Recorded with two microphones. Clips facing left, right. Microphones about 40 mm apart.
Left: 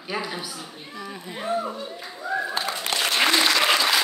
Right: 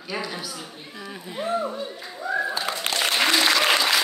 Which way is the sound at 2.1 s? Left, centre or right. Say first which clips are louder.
Right 2 dB; centre.